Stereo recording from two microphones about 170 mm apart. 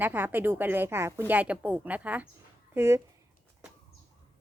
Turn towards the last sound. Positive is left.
turn(degrees=-15)  # may be behind; listen again after turning